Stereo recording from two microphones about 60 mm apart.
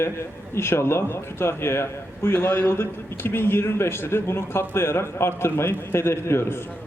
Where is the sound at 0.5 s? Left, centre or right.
Left.